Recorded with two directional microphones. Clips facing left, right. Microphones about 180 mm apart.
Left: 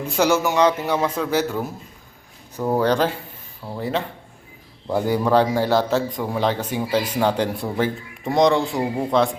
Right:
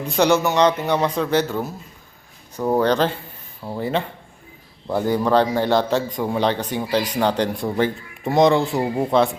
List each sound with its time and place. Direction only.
0.0 s a man's voice: 5° left (ahead or behind)
2.7 s a man's voice: 10° left (ahead or behind)